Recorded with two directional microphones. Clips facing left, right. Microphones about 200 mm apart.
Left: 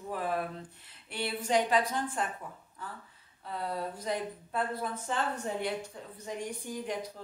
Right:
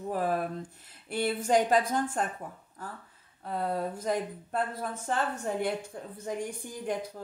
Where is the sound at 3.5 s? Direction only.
50° right (ahead or behind).